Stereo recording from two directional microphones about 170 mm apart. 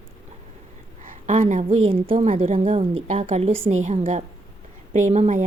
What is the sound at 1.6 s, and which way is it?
A woman's voice, 35° right (ahead or behind).